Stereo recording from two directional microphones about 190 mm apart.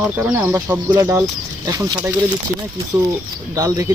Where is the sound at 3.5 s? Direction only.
15° right (ahead or behind).